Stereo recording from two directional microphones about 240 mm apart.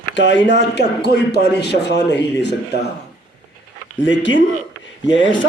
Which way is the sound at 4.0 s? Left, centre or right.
Left.